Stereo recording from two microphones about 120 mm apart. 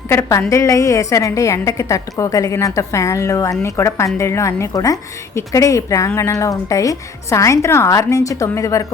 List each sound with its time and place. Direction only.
0.1 s a woman's voice: 25° left (ahead or behind)